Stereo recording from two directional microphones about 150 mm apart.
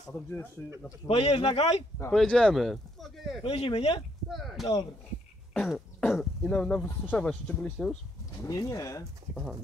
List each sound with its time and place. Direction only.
1.0 s a man's voice: 45° left (ahead or behind)
2.0 s speech: 5° left (ahead or behind)
3.4 s speech: 35° left (ahead or behind)
4.3 s speech: centre (ahead or behind)
8.5 s speech: 20° left (ahead or behind)
9.3 s speech: centre (ahead or behind)